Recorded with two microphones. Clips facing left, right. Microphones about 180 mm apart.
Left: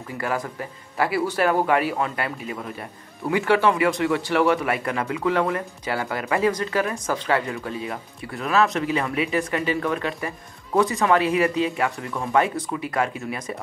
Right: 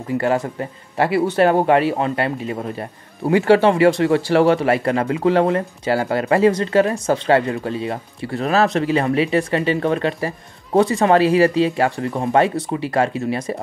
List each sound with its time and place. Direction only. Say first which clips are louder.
0.2 s a man's voice: right 4 dB; 25° right (ahead or behind)